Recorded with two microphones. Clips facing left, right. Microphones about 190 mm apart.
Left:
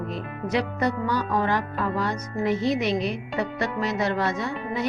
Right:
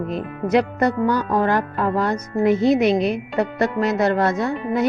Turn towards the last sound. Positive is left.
turn(degrees=-50)  # may be behind; listen again after turning